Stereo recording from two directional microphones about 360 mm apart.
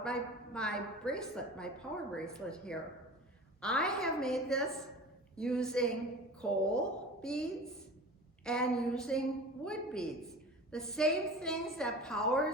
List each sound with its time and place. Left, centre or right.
0.0 s a woman's voice: centre
8.4 s a woman's voice: centre